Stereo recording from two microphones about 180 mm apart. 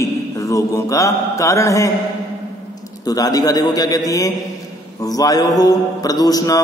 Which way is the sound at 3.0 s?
20° left (ahead or behind).